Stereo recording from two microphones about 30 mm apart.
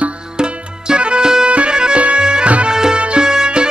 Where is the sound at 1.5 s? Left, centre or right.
Right.